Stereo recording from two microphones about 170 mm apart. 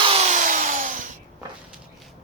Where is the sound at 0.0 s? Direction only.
35° right (ahead or behind).